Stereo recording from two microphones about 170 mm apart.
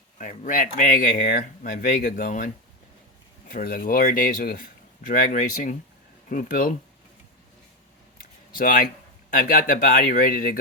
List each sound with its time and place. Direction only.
0.2 s speech: 50° left (ahead or behind)
3.5 s speech: 55° left (ahead or behind)
8.5 s speech: 55° left (ahead or behind)